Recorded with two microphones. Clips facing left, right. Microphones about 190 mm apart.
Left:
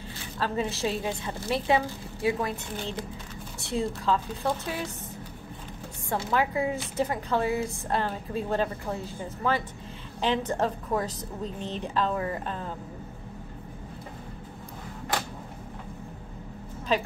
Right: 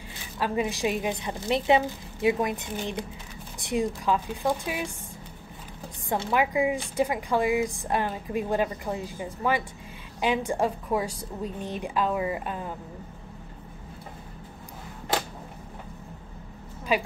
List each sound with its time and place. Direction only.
0.4 s speech: 15° right (ahead or behind)
6.3 s speech: 15° right (ahead or behind)
16.9 s speech: 10° right (ahead or behind)